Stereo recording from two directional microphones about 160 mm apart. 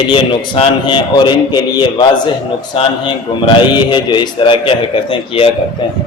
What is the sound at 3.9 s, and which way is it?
Speech, 30° left (ahead or behind).